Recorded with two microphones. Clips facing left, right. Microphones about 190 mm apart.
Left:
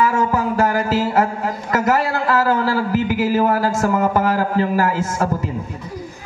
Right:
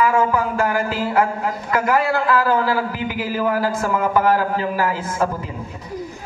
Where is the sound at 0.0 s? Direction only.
40° left (ahead or behind).